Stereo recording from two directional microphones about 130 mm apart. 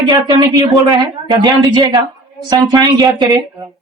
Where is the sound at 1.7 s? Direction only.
35° right (ahead or behind).